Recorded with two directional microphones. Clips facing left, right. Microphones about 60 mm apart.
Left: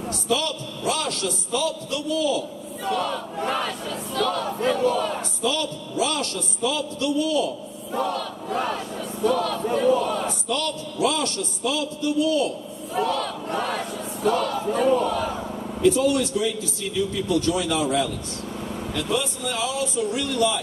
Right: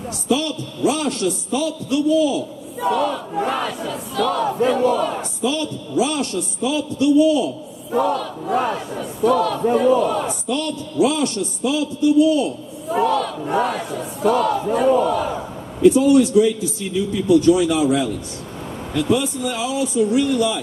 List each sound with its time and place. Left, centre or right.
0.3 s a man's voice: centre
2.9 s battle cry: centre
5.4 s a man's voice: centre
7.9 s battle cry: centre
10.5 s a man's voice: centre
13.0 s battle cry: centre
15.8 s a man's voice: centre
19.0 s a man's voice: centre